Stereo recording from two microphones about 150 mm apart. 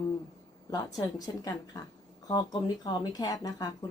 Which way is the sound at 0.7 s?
25° left (ahead or behind).